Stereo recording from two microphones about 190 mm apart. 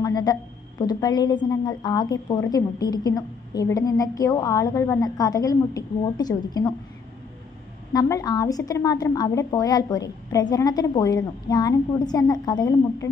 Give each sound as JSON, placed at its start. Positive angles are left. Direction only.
{"t": 0.0, "sound": "a woman's voice", "side_deg": 20}
{"t": 7.9, "sound": "a woman's voice", "side_deg": 20}